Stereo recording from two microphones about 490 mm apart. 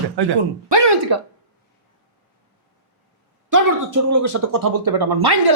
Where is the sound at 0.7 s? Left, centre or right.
Right.